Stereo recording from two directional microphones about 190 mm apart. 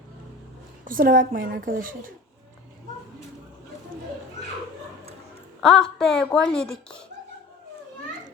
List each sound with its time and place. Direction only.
0.9 s a woman's voice: 45° right (ahead or behind)
5.5 s a woman's voice: 5° left (ahead or behind)